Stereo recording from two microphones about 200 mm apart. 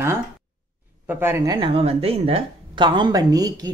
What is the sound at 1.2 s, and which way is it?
Speech, 10° right (ahead or behind).